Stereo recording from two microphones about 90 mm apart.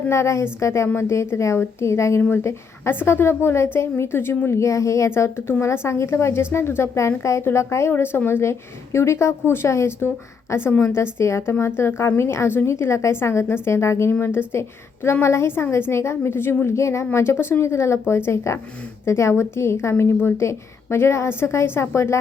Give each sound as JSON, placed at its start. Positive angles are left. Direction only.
{"t": 0.1, "sound": "a woman's voice", "side_deg": 30}